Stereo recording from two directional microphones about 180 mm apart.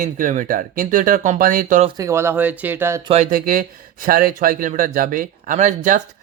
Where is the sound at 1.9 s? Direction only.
20° right (ahead or behind).